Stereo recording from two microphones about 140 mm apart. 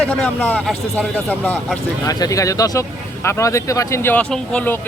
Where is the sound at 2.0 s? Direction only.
25° left (ahead or behind).